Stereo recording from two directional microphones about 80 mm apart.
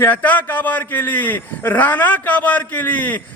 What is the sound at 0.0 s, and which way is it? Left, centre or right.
A man's voice, left.